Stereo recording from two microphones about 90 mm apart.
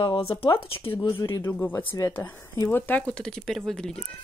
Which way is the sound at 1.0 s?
55° left (ahead or behind).